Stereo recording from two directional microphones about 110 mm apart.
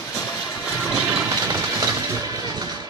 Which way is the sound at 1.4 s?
25° right (ahead or behind).